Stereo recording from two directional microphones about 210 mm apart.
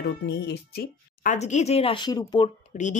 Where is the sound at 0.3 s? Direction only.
55° left (ahead or behind).